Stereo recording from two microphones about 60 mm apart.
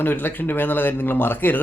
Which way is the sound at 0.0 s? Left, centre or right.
Left.